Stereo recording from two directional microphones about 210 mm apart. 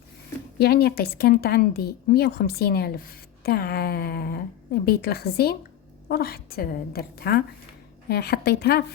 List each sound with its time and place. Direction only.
0.6 s a woman's voice: 50° left (ahead or behind)